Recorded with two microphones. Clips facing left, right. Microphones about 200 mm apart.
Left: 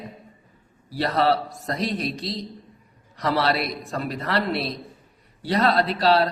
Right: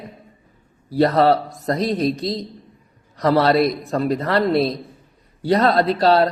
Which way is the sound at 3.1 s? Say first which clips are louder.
Right 7 dB; 40° right (ahead or behind).